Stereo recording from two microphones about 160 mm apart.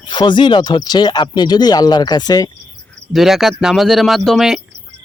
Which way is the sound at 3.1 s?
Centre (ahead or behind).